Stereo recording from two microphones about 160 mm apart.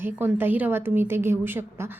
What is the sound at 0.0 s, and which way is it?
A woman's voice, 10° right (ahead or behind).